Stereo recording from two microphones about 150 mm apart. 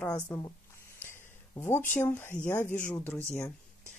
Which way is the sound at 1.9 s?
15° left (ahead or behind).